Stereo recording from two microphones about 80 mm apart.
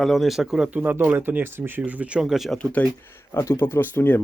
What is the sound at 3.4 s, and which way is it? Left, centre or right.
Speech, left.